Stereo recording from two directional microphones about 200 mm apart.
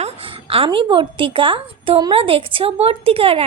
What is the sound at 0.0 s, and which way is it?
A woman's voice, 25° right (ahead or behind).